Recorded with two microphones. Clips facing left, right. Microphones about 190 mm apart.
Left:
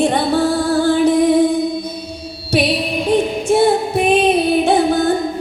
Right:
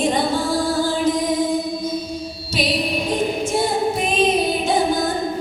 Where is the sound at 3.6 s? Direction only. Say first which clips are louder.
Left 7 dB; 65° left (ahead or behind).